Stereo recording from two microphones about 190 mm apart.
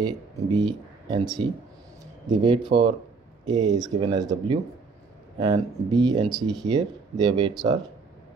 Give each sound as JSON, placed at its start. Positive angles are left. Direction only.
{"t": 0.0, "sound": "speech", "side_deg": -20}